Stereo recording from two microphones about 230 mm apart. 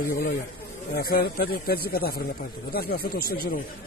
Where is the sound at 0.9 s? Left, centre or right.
Left.